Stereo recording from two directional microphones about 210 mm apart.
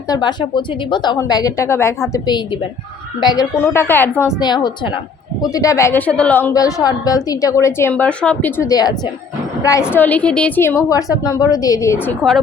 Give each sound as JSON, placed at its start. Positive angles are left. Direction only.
{"t": 0.1, "sound": "a woman's voice", "side_deg": 20}
{"t": 9.9, "sound": "a woman's voice", "side_deg": 10}